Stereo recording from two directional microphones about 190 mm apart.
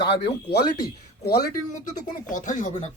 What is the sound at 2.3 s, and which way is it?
Speech, 40° left (ahead or behind).